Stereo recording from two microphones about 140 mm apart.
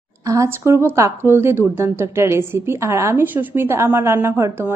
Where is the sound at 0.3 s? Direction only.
20° right (ahead or behind).